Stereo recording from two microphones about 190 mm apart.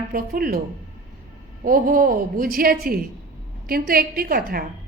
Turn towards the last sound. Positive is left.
turn(degrees=-50)  # may be behind; listen again after turning